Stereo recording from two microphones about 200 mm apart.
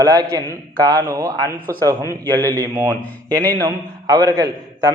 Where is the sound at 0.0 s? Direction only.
15° right (ahead or behind).